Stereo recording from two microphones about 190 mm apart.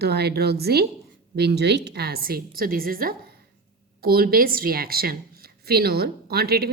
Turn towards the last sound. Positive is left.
turn(degrees=-55)  # may be behind; listen again after turning